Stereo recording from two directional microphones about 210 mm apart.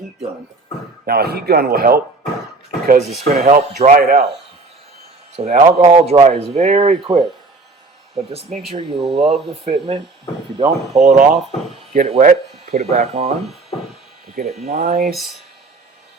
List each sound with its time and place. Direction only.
1.0 s a man's voice: 50° right (ahead or behind)
3.2 s speech: 35° right (ahead or behind)
5.4 s speech: 35° right (ahead or behind)
8.4 s speech: 35° right (ahead or behind)
14.4 s a man's voice: 50° right (ahead or behind)